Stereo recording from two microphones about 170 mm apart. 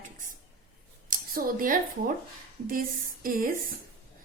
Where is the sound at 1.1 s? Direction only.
55° right (ahead or behind).